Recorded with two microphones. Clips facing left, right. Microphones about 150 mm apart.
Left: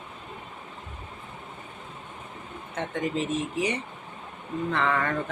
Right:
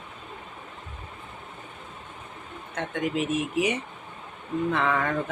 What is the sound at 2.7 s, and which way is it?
Speech, centre (ahead or behind).